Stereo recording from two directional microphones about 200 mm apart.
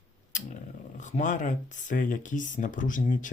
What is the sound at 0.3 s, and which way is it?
Speech, 40° left (ahead or behind).